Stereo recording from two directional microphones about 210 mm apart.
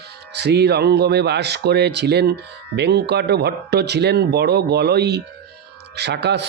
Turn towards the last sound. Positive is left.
turn(degrees=-55)  # may be behind; listen again after turning